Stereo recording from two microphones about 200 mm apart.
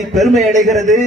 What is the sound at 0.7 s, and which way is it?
Speech, 35° right (ahead or behind).